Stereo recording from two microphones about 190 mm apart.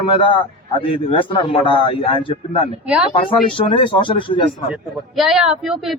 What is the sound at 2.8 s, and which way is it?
Speech, 5° right (ahead or behind).